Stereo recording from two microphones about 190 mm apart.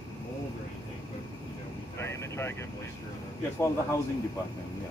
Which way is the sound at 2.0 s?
15° left (ahead or behind).